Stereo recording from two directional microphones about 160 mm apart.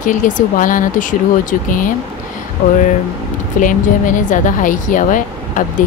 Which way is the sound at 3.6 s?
55° left (ahead or behind).